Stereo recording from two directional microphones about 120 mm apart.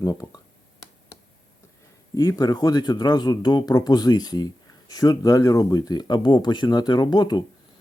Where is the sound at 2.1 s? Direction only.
30° left (ahead or behind).